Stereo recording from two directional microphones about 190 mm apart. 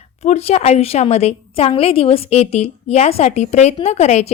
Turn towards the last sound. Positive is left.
turn(degrees=35)  # may be behind; listen again after turning